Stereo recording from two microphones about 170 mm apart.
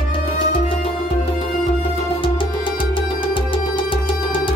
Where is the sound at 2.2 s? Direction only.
30° left (ahead or behind).